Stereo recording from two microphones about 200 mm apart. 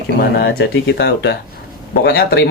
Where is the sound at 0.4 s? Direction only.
55° left (ahead or behind).